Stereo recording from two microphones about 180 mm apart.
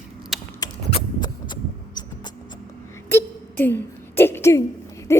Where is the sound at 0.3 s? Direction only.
Centre (ahead or behind).